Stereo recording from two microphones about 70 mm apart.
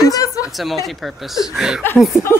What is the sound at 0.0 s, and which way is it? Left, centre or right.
Chuckle, left.